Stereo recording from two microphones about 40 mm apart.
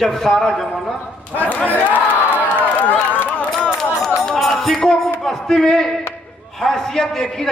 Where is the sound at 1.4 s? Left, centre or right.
Left.